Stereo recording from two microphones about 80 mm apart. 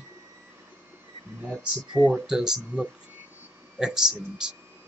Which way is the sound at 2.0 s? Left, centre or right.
Centre.